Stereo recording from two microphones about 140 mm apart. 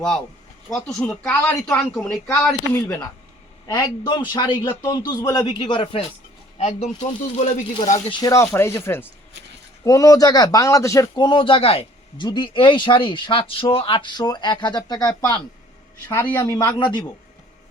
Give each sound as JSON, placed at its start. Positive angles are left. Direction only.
{"t": 0.7, "sound": "speech", "side_deg": 5}
{"t": 2.8, "sound": "a man's voice", "side_deg": 20}
{"t": 6.6, "sound": "speech", "side_deg": 55}
{"t": 8.0, "sound": "a man's voice", "side_deg": 35}
{"t": 8.3, "sound": "a man's voice", "side_deg": 20}
{"t": 16.0, "sound": "a man's voice", "side_deg": 15}